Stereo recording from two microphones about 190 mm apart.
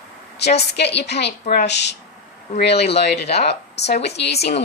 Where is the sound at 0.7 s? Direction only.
65° left (ahead or behind).